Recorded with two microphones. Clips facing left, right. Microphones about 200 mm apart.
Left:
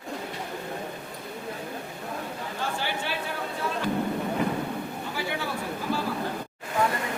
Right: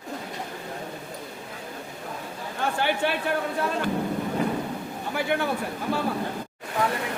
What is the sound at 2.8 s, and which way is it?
Chatter, 60° right (ahead or behind).